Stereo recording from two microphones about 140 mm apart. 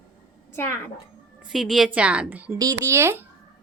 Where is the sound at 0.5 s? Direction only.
20° left (ahead or behind).